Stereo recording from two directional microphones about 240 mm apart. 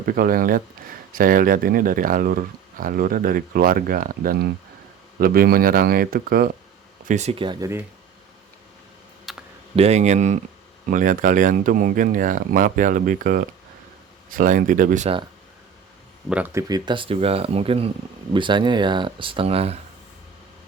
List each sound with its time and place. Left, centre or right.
0.0 s speech: right
7.1 s speech: right
9.3 s computer keyboard: centre
9.7 s speech: right
16.3 s speech: centre